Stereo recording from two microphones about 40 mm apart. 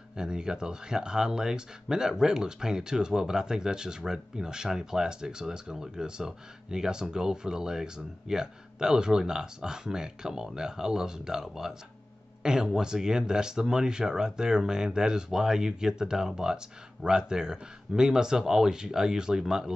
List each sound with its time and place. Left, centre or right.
0.1 s speech: centre
12.4 s speech: right